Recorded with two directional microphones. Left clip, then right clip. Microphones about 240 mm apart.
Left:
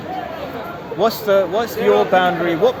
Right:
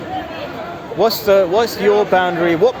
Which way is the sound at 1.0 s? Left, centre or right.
Right.